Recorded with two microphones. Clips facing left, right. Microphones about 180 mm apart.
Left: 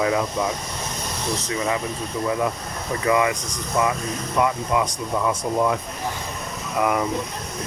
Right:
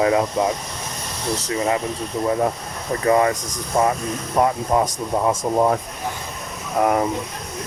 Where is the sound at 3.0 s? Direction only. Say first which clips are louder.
Right 3 dB; 40° right (ahead or behind).